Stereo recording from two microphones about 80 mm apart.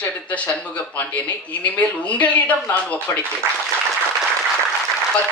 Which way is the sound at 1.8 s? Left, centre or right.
Centre.